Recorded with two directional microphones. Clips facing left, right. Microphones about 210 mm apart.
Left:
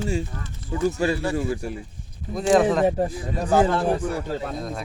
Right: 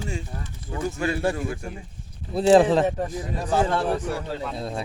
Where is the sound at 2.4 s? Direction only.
30° right (ahead or behind).